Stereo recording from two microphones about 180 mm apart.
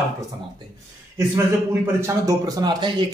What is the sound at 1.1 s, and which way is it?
A man's voice, 15° right (ahead or behind).